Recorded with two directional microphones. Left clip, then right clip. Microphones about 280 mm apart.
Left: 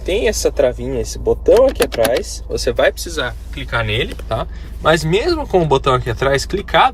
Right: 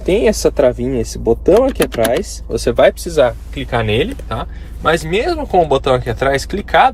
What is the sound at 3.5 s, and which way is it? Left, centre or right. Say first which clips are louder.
Speech: right 3 dB; centre.